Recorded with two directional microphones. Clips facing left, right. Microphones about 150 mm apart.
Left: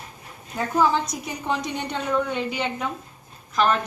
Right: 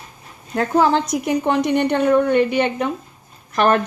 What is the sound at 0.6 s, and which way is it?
A woman's voice, 70° right (ahead or behind).